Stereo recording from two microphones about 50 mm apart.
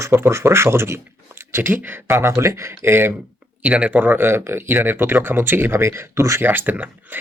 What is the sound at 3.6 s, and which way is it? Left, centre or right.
Speech, right.